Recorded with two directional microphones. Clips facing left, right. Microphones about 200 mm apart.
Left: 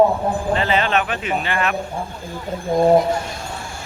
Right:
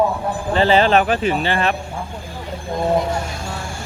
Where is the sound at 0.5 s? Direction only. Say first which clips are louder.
Right 8 dB; 30° right (ahead or behind).